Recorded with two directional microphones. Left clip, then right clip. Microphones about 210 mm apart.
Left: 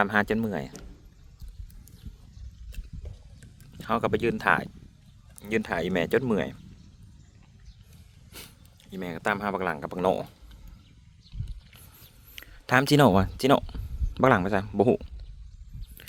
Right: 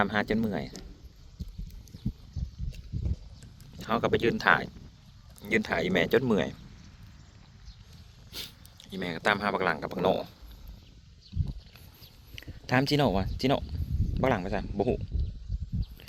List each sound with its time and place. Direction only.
0.0 s speech: 10° left (ahead or behind)
3.4 s speech: 10° left (ahead or behind)
8.3 s speech: centre (ahead or behind)
9.9 s speech: 10° left (ahead or behind)
12.4 s a man's voice: 25° left (ahead or behind)